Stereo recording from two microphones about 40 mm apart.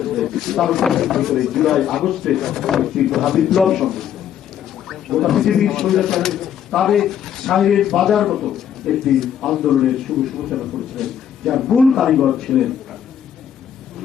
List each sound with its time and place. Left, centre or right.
0.0 s speech: centre